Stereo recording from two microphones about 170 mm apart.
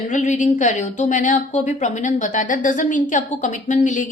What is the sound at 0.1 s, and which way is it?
A woman's voice, 45° left (ahead or behind).